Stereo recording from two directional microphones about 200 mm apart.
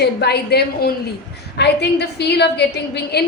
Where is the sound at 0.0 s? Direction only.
55° left (ahead or behind).